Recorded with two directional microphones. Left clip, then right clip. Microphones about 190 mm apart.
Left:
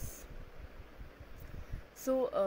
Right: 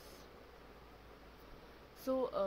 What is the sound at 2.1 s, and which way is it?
Speech, 15° left (ahead or behind).